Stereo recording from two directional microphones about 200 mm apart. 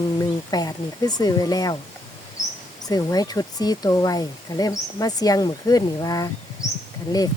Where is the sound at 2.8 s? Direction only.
20° left (ahead or behind).